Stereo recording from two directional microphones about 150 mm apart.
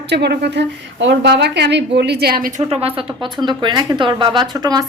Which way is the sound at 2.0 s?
90° right.